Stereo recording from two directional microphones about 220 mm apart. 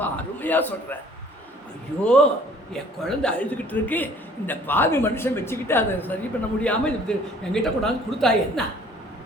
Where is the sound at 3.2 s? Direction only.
5° left (ahead or behind).